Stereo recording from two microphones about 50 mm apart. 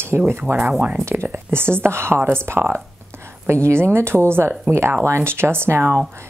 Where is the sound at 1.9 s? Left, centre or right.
Right.